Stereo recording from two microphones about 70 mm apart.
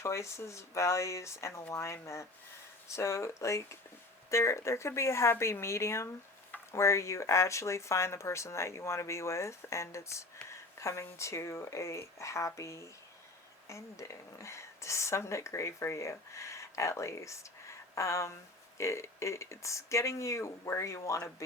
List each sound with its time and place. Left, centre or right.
0.0 s speech: left